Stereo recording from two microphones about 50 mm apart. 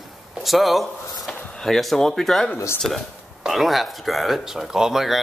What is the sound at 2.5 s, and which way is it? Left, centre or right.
Speech, left.